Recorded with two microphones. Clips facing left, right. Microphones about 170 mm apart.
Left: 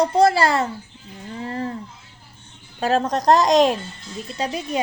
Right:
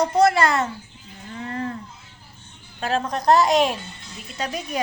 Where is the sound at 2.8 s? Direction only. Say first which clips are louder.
Left 3 dB; 40° left (ahead or behind).